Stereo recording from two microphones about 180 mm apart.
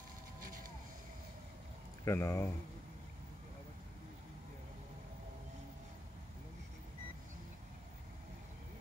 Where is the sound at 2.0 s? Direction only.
15° left (ahead or behind).